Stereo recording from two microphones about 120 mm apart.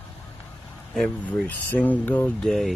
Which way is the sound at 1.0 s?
10° left (ahead or behind).